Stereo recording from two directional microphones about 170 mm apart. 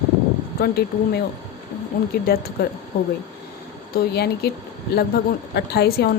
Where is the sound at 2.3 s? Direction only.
65° left (ahead or behind).